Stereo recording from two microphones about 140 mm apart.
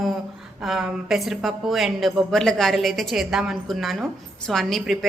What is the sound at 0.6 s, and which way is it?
A woman's voice, centre (ahead or behind).